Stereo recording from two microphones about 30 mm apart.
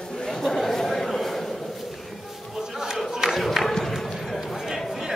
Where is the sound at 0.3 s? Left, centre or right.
Centre.